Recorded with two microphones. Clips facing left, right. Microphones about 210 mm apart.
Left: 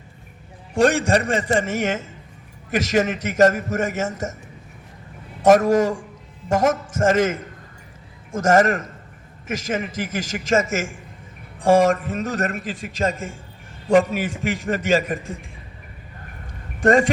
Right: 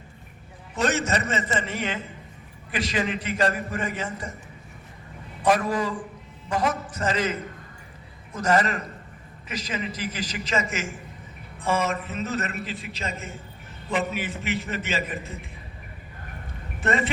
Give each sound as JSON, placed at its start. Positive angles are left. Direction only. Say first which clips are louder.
{"t": 0.9, "sound": "a man's voice", "louder": "left 2 dB", "side_deg": 10}
{"t": 1.5, "sound": "a man's voice", "louder": "left 7 dB", "side_deg": 45}
{"t": 5.4, "sound": "a man's voice", "louder": "left 8 dB", "side_deg": 45}
{"t": 11.9, "sound": "a man's voice", "louder": "left 4 dB", "side_deg": 45}
{"t": 16.8, "sound": "a man's voice", "louder": "left 9 dB", "side_deg": 45}